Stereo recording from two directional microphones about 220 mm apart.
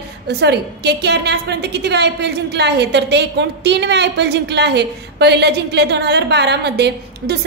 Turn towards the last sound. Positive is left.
turn(degrees=-50)  # may be behind; listen again after turning